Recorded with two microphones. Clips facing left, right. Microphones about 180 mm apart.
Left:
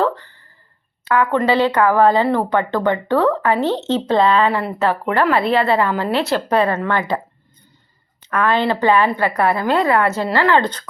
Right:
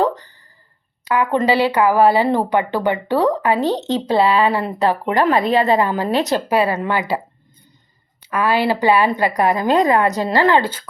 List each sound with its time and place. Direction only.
0.0 s a sound: 15° right (ahead or behind)
1.0 s speech: 15° right (ahead or behind)
8.2 s speech: 10° right (ahead or behind)